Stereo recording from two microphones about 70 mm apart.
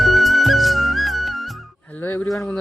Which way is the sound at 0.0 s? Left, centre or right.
Centre.